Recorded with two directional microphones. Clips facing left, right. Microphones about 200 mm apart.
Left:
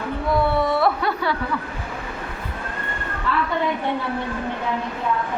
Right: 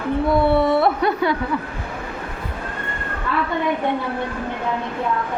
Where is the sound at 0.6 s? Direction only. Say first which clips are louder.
Right 3 dB; 25° right (ahead or behind).